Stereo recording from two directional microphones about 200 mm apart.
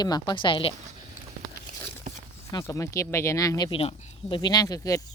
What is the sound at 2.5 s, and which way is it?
Speech, 15° left (ahead or behind).